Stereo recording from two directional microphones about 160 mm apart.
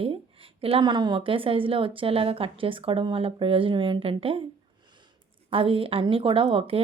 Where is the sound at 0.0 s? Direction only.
35° right (ahead or behind).